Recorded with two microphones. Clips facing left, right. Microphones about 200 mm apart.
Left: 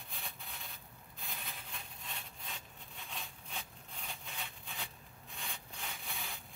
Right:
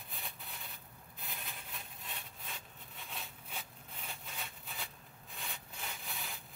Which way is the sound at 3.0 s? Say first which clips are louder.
Even; 5° right (ahead or behind).